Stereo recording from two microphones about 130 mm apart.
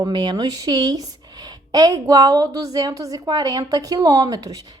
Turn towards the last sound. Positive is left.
turn(degrees=-30)  # may be behind; listen again after turning